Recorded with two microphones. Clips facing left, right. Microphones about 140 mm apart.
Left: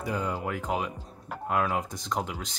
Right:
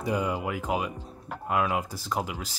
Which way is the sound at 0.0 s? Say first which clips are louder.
Right 3 dB; 10° right (ahead or behind).